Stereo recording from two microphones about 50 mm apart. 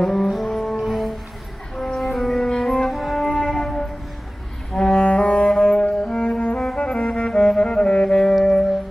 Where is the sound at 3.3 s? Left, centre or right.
Centre.